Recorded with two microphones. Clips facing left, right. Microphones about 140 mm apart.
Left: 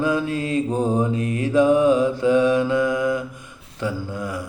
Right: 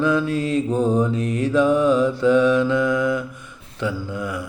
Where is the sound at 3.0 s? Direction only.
40° left (ahead or behind).